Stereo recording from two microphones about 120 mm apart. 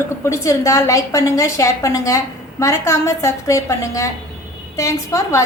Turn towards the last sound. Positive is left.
turn(degrees=25)  # may be behind; listen again after turning